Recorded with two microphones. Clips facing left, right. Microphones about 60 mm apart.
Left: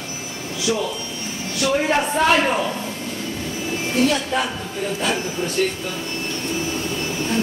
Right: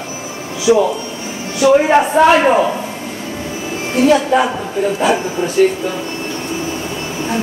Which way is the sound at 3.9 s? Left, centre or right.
Centre.